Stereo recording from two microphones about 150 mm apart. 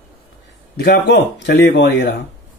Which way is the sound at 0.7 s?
90° left.